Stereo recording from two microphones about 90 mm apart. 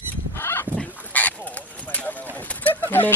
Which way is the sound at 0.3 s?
30° left (ahead or behind).